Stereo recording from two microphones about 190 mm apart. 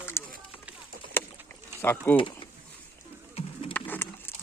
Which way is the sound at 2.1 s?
25° left (ahead or behind).